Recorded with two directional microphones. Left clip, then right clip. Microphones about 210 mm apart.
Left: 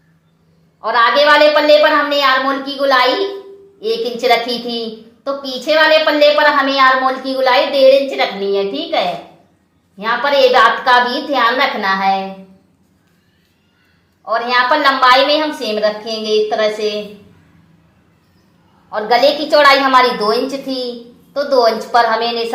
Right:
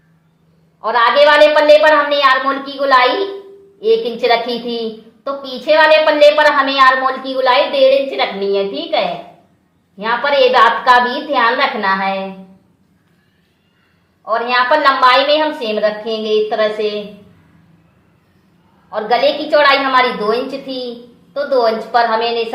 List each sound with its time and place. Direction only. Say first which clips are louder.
0.8 s a woman's voice: right 1 dB; 15° left (ahead or behind)
14.3 s a woman's voice: even; 20° left (ahead or behind)
18.9 s a woman's voice: left 2 dB; 25° left (ahead or behind)